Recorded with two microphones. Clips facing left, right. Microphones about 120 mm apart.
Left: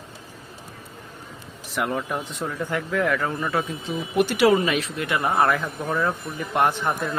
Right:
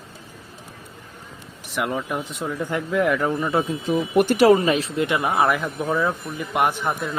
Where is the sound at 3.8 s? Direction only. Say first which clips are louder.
Right 5 dB; 45° right (ahead or behind).